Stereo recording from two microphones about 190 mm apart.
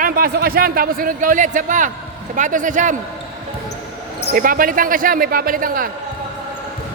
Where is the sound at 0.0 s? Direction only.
50° right (ahead or behind).